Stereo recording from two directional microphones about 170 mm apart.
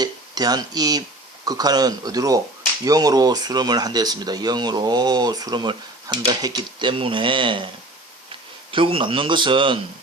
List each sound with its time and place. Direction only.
0.0 s speech: 25° right (ahead or behind)
8.7 s speech: 30° right (ahead or behind)